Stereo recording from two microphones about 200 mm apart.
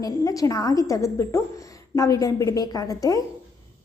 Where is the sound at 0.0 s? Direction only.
15° left (ahead or behind).